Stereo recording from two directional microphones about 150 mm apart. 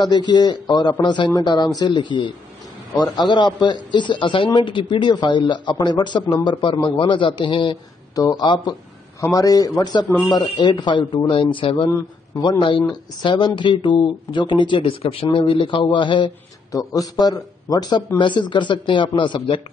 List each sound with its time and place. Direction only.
0.0 s a man's voice: 30° left (ahead or behind)